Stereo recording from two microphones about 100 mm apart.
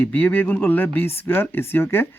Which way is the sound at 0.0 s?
20° left (ahead or behind).